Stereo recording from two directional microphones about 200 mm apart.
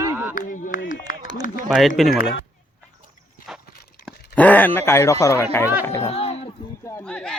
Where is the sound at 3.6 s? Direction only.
50° left (ahead or behind).